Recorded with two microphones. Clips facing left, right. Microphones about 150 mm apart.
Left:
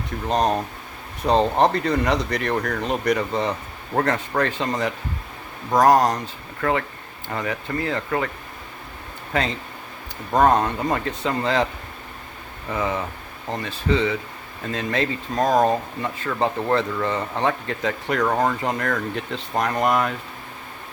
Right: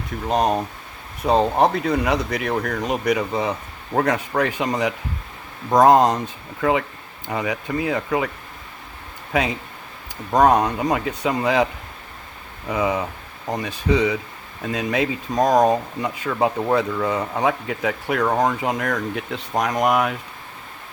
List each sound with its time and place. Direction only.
0.3 s speech: 10° right (ahead or behind)
9.3 s speech: 10° right (ahead or behind)